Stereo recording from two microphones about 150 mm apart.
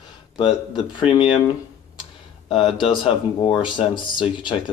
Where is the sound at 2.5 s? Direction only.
35° left (ahead or behind).